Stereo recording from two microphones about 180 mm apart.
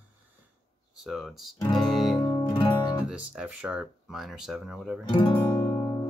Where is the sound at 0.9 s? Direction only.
Centre (ahead or behind).